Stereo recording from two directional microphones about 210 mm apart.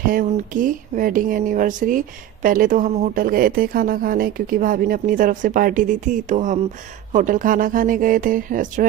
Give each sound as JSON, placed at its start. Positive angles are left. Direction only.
{"t": 0.1, "sound": "speech", "side_deg": -40}